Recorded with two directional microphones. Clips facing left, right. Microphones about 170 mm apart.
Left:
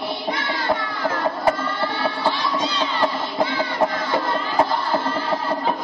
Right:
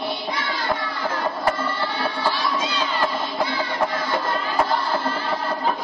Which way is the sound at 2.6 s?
5° right (ahead or behind).